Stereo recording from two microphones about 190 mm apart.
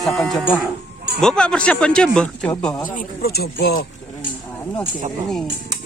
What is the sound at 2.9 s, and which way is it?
Speech, 50° left (ahead or behind).